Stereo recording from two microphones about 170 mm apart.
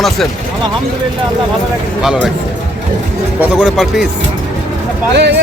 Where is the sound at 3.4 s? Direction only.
5° right (ahead or behind).